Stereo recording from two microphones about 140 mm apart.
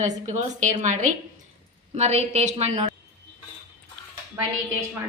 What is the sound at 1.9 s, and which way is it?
A woman's voice, 50° right (ahead or behind).